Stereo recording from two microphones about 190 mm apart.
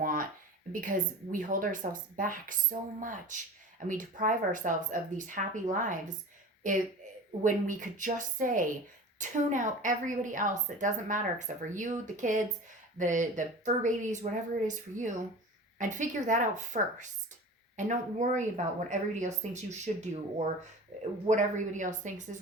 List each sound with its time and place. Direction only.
0.0 s a sound: 45° right (ahead or behind)
0.7 s speech: 45° right (ahead or behind)
7.4 s a woman's voice: 45° right (ahead or behind)
15.8 s a woman's voice: 40° right (ahead or behind)
20.9 s a sound: 40° right (ahead or behind)
21.2 s a woman's voice: 40° right (ahead or behind)